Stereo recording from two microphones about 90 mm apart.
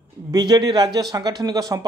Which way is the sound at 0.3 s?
50° right (ahead or behind).